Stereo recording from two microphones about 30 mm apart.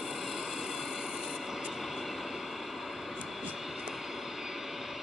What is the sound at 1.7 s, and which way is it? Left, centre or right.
Vehicle, centre.